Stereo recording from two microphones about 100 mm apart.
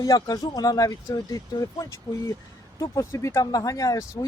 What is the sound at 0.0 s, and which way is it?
Speech, 40° left (ahead or behind).